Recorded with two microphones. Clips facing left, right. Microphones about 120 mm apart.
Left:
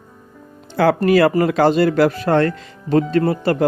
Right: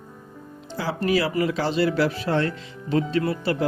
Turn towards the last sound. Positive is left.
turn(degrees=50)  # may be behind; listen again after turning